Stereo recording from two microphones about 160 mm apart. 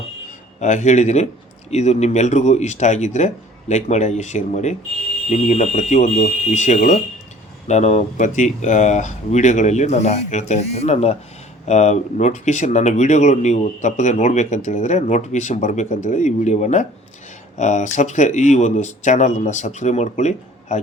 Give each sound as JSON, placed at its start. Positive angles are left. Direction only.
{"t": 0.6, "sound": "speech", "side_deg": 50}